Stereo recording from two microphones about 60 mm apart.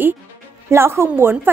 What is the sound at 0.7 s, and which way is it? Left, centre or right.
Speech, right.